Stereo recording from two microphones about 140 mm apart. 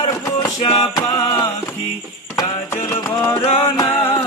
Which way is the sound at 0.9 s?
25° left (ahead or behind).